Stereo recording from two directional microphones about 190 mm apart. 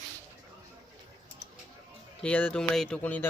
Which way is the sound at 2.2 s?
5° left (ahead or behind).